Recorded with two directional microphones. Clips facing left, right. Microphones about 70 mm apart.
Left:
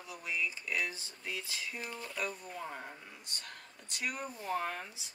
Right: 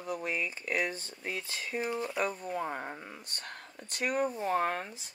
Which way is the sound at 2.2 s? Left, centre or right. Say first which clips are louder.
Right 7 dB; right.